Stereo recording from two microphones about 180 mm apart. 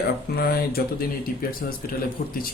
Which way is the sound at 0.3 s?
55° left (ahead or behind).